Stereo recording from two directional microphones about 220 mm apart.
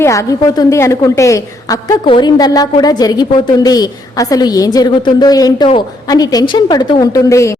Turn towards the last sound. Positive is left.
turn(degrees=15)  # may be behind; listen again after turning